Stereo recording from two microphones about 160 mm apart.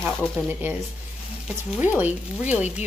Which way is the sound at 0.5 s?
10° right (ahead or behind).